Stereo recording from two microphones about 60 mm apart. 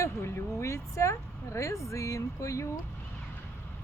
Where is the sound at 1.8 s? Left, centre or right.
Left.